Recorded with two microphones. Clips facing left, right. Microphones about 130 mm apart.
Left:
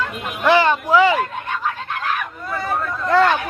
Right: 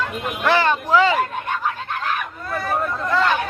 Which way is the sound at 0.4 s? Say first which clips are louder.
Left 3 dB; 15° left (ahead or behind).